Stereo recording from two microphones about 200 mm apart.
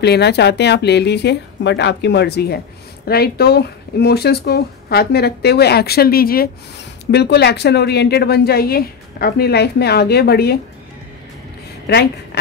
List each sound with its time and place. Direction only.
0.0 s a woman's voice: 55° left (ahead or behind)
11.9 s speech: 55° left (ahead or behind)